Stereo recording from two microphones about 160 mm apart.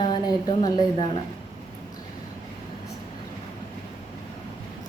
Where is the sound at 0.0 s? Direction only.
25° left (ahead or behind).